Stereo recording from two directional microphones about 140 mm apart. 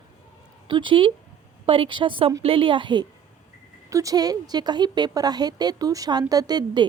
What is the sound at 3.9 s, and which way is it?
A woman's voice, 25° right (ahead or behind).